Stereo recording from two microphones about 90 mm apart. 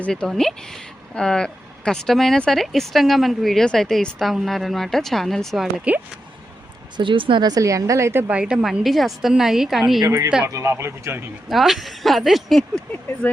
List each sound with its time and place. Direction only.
0.0 s speech: 10° left (ahead or behind)
5.9 s a woman's voice: 15° right (ahead or behind)
6.9 s speech: 65° right (ahead or behind)
7.4 s a woman's voice: 40° right (ahead or behind)
8.3 s a woman's voice: 10° right (ahead or behind)
10.4 s speech: 30° right (ahead or behind)
11.4 s speech: 5° right (ahead or behind)